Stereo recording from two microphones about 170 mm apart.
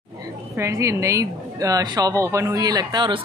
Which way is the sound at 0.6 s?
15° right (ahead or behind).